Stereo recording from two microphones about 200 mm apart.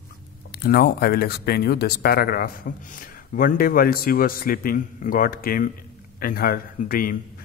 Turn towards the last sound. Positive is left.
turn(degrees=45)  # may be behind; listen again after turning